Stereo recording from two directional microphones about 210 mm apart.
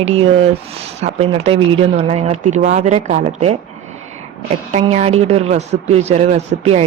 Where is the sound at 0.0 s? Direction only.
30° right (ahead or behind).